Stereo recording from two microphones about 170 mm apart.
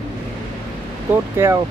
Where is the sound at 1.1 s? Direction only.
15° right (ahead or behind).